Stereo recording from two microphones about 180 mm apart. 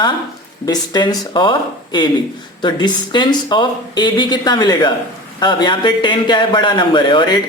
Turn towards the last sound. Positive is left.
turn(degrees=25)  # may be behind; listen again after turning